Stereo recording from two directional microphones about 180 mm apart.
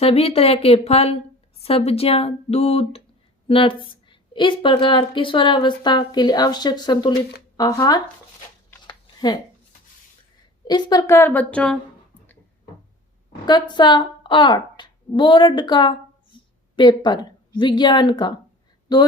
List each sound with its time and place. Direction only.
0.0 s a woman's voice: 35° left (ahead or behind)
8.8 s a sound: 25° left (ahead or behind)
10.7 s a woman's voice: 25° left (ahead or behind); by 11.8 s 5° left (ahead or behind)
13.4 s a woman's voice: 25° left (ahead or behind)